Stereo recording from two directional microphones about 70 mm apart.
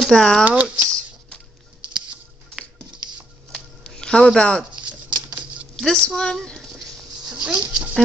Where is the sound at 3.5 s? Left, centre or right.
Centre.